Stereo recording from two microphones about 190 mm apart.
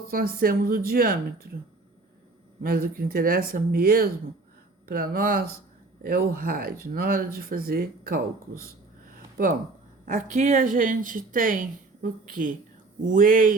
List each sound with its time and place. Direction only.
0.1 s a woman's voice: 50° right (ahead or behind)
2.6 s a woman's voice: 50° right (ahead or behind)
10.1 s a woman's voice: 45° right (ahead or behind)